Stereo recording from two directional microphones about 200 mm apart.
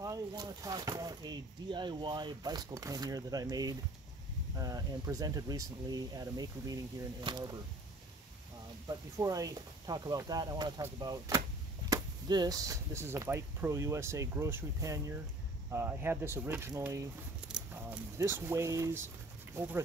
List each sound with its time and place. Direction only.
0.0 s speech: 20° right (ahead or behind)
8.8 s speech: 15° right (ahead or behind)